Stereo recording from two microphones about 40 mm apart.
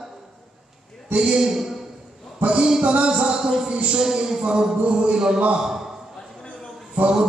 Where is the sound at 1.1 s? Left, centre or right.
Centre.